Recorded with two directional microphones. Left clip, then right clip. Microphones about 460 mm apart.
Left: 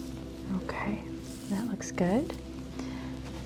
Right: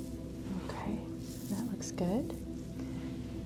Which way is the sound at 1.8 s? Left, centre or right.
Left.